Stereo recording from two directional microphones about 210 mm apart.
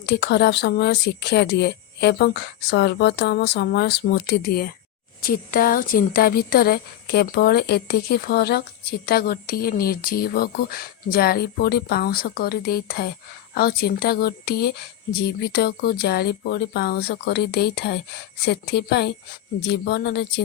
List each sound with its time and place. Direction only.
0.0 s speech: 55° left (ahead or behind)